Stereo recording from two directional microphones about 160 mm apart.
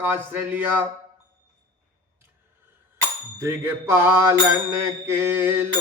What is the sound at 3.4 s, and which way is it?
Speech, 15° right (ahead or behind).